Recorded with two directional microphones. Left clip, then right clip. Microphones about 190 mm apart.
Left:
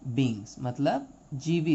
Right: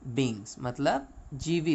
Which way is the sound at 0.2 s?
50° right (ahead or behind).